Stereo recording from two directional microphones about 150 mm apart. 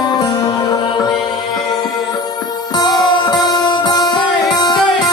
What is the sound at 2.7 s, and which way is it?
Music, 25° left (ahead or behind).